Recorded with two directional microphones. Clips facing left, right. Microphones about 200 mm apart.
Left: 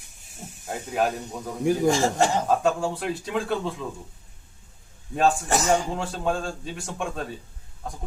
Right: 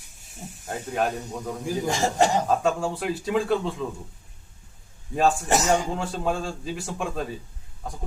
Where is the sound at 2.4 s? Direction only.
Centre (ahead or behind).